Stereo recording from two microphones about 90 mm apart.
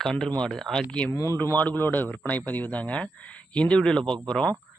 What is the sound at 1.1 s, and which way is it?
Speech, 35° left (ahead or behind).